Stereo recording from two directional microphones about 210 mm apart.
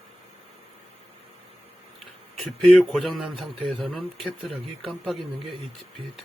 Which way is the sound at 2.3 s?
Centre (ahead or behind).